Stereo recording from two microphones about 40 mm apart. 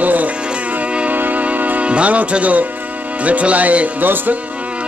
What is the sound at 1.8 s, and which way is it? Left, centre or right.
Speech, right.